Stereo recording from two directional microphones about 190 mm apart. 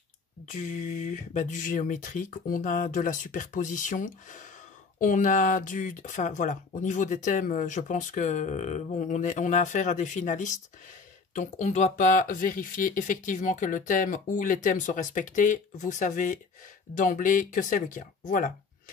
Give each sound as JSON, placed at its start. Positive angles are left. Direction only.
{"t": 0.5, "sound": "speech", "side_deg": 40}